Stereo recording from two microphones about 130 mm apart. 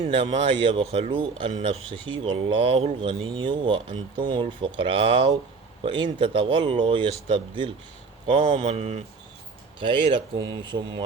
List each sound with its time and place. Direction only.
0.1 s speech: 40° right (ahead or behind)
0.9 s speech: 55° right (ahead or behind)
1.1 s speech: 40° right (ahead or behind)
1.5 s speech: 50° right (ahead or behind)
2.0 s speech: 40° right (ahead or behind)
8.7 s speech: 55° right (ahead or behind)
9.8 s speech: 40° right (ahead or behind)